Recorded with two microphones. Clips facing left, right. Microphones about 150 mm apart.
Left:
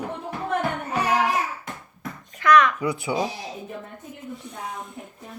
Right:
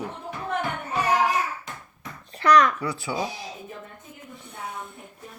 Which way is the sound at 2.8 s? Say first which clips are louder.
Left 4 dB; 20° left (ahead or behind).